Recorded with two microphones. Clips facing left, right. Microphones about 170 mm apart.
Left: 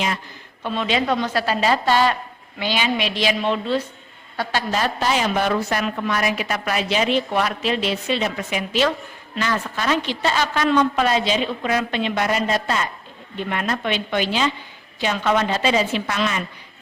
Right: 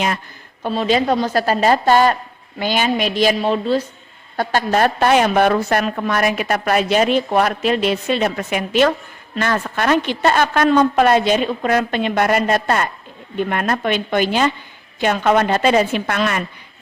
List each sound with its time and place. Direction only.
0.6 s a woman's voice: 40° right (ahead or behind)
4.4 s a woman's voice: 50° right (ahead or behind)